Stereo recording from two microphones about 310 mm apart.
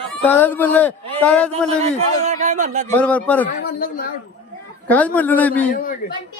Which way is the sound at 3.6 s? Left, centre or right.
Left.